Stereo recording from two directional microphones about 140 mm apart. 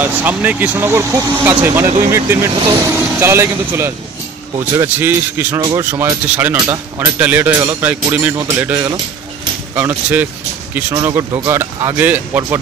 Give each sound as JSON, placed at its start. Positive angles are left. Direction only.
{"t": 0.0, "sound": "speech", "side_deg": -10}
{"t": 5.6, "sound": "speech", "side_deg": -25}
{"t": 5.9, "sound": "speech", "side_deg": -15}
{"t": 9.8, "sound": "speech", "side_deg": -15}